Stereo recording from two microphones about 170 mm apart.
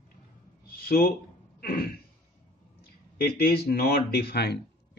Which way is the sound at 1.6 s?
60° left (ahead or behind).